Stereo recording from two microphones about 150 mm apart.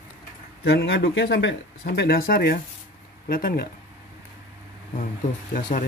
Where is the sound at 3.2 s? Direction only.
75° left (ahead or behind).